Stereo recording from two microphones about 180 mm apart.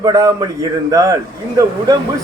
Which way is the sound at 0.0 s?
20° right (ahead or behind).